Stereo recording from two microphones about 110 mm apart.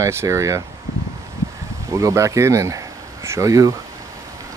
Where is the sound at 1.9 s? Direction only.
30° right (ahead or behind).